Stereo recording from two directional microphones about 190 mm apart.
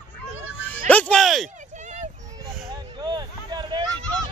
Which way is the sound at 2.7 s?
20° right (ahead or behind).